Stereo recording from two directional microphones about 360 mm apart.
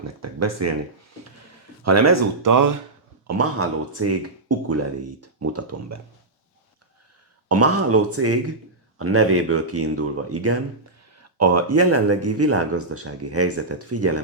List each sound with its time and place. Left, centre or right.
0.0 s speech: right
1.8 s speech: right
3.2 s speech: right
7.4 s speech: right